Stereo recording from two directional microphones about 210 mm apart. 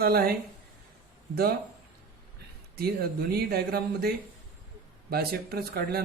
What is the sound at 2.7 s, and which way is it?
Speech, 45° right (ahead or behind).